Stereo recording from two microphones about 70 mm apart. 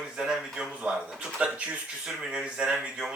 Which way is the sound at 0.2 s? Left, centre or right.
Centre.